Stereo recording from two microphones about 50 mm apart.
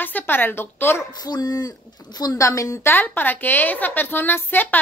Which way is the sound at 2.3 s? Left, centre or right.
Left.